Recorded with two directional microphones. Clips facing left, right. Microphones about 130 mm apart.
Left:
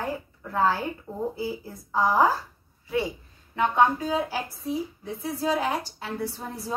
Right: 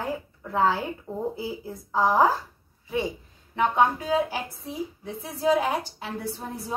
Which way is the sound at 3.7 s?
20° right (ahead or behind).